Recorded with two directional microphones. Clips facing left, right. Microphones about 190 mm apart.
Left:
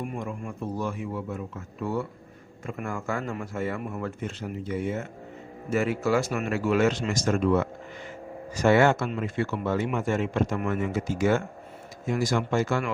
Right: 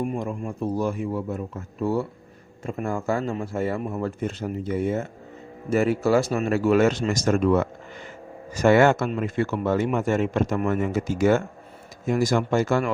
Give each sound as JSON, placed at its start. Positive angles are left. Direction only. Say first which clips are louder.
{"t": 0.0, "sound": "speech", "louder": "right 5 dB", "side_deg": -30}